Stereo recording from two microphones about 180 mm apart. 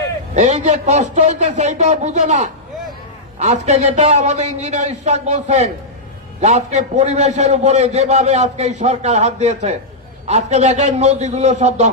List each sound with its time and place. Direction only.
0.3 s a man's voice: 40° right (ahead or behind)